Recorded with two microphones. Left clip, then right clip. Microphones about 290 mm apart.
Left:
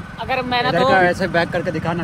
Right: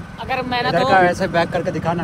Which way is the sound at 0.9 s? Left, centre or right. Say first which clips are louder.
Right 1 dB; right.